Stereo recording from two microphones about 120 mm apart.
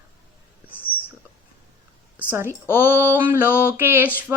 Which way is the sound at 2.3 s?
20° right (ahead or behind).